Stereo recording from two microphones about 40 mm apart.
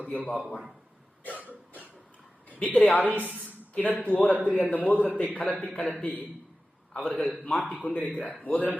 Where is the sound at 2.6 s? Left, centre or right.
Left.